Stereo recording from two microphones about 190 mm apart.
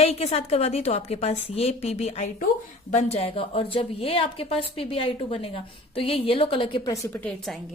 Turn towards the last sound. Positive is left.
turn(degrees=5)  # may be behind; listen again after turning